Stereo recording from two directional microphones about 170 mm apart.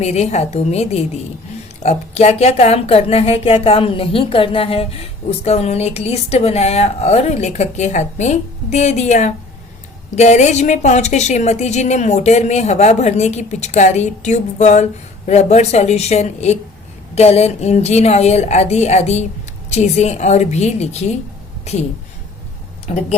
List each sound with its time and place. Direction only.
0.0 s a woman's voice: 40° left (ahead or behind)
22.9 s a woman's voice: 35° left (ahead or behind)